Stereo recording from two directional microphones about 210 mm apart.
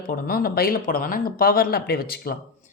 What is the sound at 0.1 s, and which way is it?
Speech, 45° left (ahead or behind).